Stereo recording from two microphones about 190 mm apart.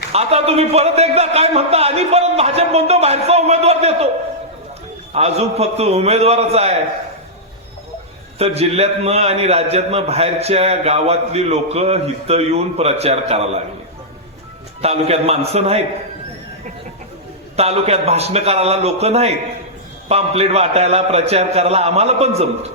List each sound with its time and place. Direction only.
0.1 s a man's voice: 35° right (ahead or behind)
5.1 s a man's voice: 35° right (ahead or behind)
8.4 s a man's voice: 35° right (ahead or behind)
14.8 s a man's voice: 35° right (ahead or behind)
17.6 s a man's voice: 35° right (ahead or behind)